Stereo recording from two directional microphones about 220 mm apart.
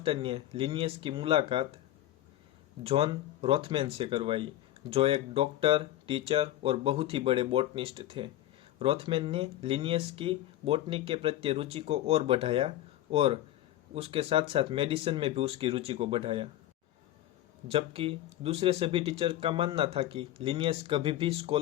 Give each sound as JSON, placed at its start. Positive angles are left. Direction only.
{"t": 0.0, "sound": "speech", "side_deg": -25}
{"t": 2.8, "sound": "speech", "side_deg": -25}
{"t": 17.7, "sound": "speech", "side_deg": -25}